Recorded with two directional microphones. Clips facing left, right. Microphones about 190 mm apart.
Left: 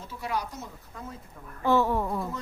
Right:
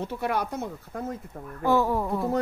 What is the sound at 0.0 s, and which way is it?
Speech, 60° right (ahead or behind).